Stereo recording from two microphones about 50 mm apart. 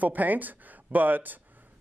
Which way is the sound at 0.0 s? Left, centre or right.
Right.